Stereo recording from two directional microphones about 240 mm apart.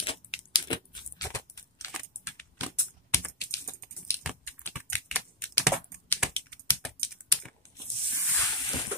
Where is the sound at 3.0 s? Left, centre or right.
Centre.